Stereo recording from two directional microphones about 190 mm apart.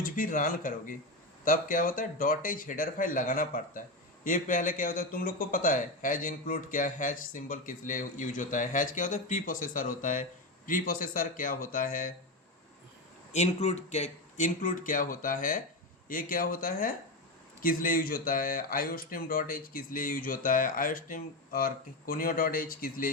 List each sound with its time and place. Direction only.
0.0 s speech: 45° left (ahead or behind)
13.3 s speech: 35° left (ahead or behind)